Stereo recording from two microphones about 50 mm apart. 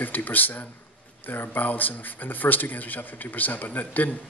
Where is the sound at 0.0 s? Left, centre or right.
Left.